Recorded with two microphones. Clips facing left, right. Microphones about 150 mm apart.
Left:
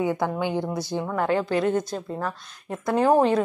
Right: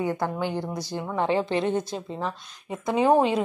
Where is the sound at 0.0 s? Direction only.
10° left (ahead or behind).